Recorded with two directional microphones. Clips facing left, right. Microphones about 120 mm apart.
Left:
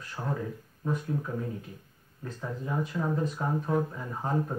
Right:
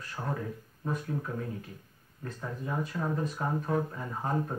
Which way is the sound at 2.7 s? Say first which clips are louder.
Left 2 dB; 5° right (ahead or behind).